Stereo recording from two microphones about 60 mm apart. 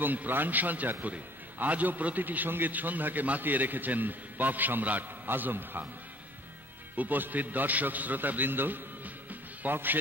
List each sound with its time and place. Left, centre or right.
0.0 s a man's voice: right
7.0 s a man's voice: right